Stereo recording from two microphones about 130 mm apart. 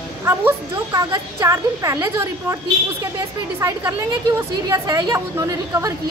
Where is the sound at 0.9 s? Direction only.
25° right (ahead or behind).